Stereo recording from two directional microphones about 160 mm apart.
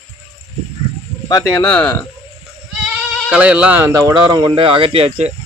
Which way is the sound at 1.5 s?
10° left (ahead or behind).